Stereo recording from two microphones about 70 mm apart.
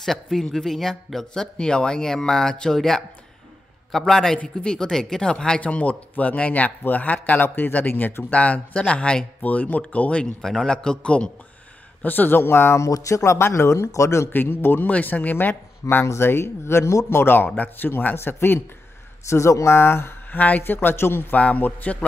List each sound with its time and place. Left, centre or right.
0.0 s a man's voice: centre
10.4 s speech: centre
12.0 s speech: left
14.3 s speech: left
15.8 s speech: left
19.2 s speech: left
20.3 s speech: left